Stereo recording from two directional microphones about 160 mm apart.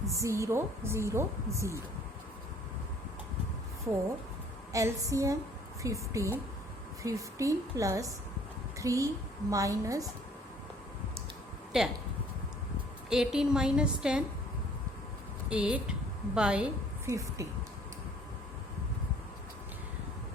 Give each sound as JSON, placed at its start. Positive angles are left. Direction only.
{"t": 0.0, "sound": "a woman's voice", "side_deg": -20}
{"t": 4.7, "sound": "a woman's voice", "side_deg": -20}
{"t": 11.7, "sound": "a woman's voice", "side_deg": -5}
{"t": 13.1, "sound": "a woman's voice", "side_deg": -5}
{"t": 15.4, "sound": "a woman's voice", "side_deg": -5}
{"t": 17.1, "sound": "a woman's voice", "side_deg": -20}